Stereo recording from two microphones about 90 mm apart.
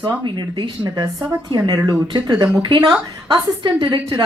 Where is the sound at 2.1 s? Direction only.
50° right (ahead or behind).